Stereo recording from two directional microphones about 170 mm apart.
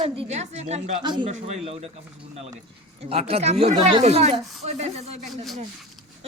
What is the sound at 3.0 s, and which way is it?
Speech, 35° right (ahead or behind).